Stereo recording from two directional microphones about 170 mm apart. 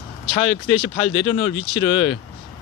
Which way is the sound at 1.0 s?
30° left (ahead or behind).